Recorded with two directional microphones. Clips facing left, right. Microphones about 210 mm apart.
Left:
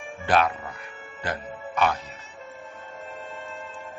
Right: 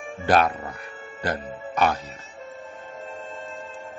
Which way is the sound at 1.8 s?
40° right (ahead or behind).